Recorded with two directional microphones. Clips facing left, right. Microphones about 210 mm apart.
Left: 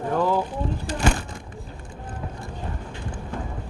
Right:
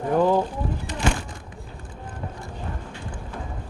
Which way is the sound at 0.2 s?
15° right (ahead or behind).